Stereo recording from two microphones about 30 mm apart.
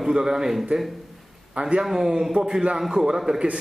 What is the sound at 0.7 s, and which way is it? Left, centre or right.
Speech, right.